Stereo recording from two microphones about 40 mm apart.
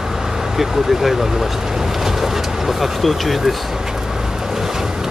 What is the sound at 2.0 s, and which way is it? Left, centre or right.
Vehicle, centre.